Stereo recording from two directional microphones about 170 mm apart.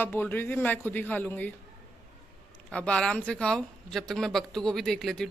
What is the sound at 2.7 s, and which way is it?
Speech, 5° left (ahead or behind).